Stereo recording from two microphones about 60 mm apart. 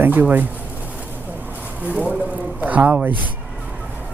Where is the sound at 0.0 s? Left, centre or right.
Right.